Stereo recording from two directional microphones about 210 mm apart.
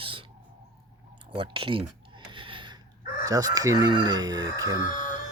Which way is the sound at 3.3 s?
15° right (ahead or behind).